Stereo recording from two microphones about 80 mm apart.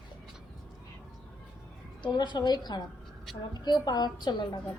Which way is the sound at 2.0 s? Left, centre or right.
Left.